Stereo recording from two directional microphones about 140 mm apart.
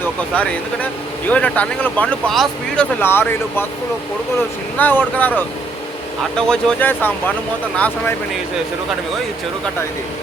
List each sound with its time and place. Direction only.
0.0 s speech: 10° left (ahead or behind)
3.0 s speech: 15° left (ahead or behind)
4.8 s speech: 15° left (ahead or behind)